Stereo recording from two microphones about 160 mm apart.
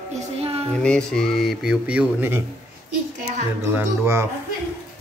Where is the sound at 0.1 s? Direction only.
40° right (ahead or behind).